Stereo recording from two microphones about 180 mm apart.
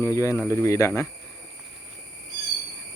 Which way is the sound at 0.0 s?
15° left (ahead or behind).